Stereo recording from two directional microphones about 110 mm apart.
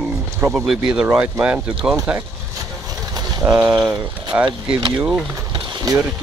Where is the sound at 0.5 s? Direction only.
10° right (ahead or behind).